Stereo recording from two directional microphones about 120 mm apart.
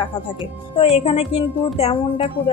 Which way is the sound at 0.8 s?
55° left (ahead or behind).